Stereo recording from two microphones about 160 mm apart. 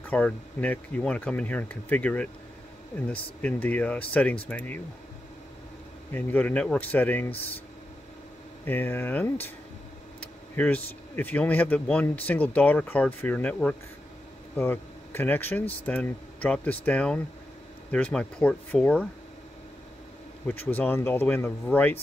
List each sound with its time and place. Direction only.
0.0 s speech: 10° left (ahead or behind)
6.1 s speech: 10° left (ahead or behind)
8.6 s speech: 10° left (ahead or behind)
10.5 s speech: 10° left (ahead or behind)
20.4 s speech: 10° left (ahead or behind)